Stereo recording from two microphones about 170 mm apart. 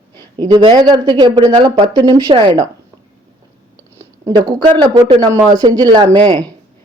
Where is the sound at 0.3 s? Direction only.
25° right (ahead or behind).